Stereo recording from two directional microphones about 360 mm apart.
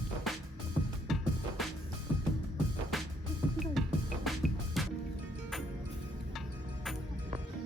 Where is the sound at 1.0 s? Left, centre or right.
Centre.